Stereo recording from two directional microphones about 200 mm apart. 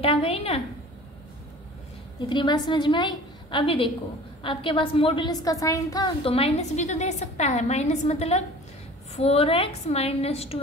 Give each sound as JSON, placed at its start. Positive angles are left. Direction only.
{"t": 0.0, "sound": "a woman's voice", "side_deg": 30}
{"t": 2.2, "sound": "a woman's voice", "side_deg": 20}